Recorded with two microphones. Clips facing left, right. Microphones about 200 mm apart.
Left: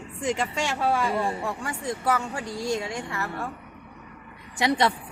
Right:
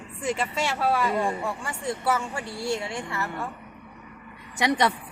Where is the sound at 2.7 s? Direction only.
15° left (ahead or behind).